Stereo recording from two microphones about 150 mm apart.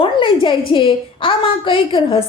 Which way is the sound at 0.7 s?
35° left (ahead or behind).